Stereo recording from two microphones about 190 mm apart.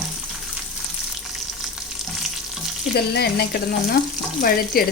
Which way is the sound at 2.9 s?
60° left (ahead or behind).